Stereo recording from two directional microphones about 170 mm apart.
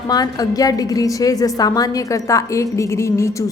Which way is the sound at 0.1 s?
20° left (ahead or behind).